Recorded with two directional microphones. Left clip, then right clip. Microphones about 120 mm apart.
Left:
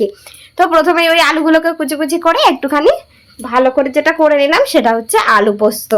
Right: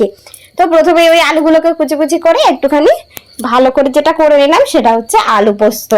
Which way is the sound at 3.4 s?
50° right (ahead or behind).